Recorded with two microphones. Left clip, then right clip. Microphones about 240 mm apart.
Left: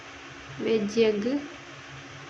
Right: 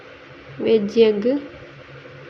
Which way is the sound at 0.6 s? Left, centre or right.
Centre.